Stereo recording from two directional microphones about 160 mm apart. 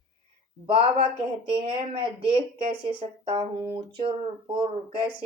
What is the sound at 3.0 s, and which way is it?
Speech, 35° right (ahead or behind).